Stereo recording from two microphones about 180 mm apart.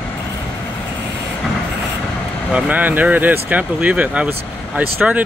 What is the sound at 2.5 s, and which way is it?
Speech, 10° right (ahead or behind).